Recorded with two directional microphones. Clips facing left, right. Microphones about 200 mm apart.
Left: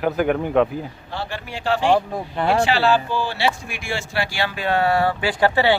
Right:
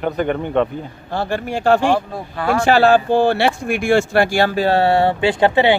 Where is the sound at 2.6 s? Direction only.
50° right (ahead or behind).